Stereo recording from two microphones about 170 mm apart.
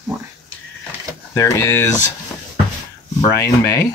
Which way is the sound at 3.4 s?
20° left (ahead or behind).